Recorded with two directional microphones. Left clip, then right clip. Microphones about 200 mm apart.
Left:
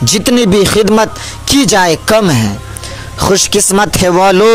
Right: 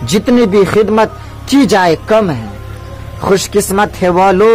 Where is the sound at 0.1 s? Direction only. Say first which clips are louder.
Even; 40° left (ahead or behind).